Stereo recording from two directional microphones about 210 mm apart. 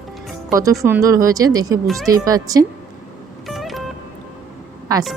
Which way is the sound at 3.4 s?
Centre (ahead or behind).